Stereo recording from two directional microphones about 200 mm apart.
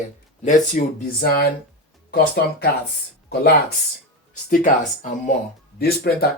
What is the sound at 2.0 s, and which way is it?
Speech, 50° left (ahead or behind).